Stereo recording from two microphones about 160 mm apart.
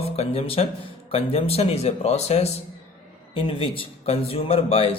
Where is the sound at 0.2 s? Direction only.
40° left (ahead or behind).